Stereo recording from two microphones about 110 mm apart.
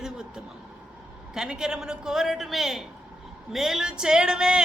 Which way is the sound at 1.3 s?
5° right (ahead or behind).